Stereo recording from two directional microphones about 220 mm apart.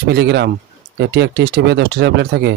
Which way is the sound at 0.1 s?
50° right (ahead or behind).